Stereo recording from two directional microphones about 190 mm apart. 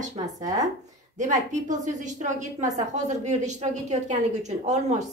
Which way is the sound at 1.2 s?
40° right (ahead or behind).